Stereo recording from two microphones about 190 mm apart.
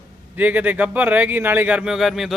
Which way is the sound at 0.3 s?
10° right (ahead or behind).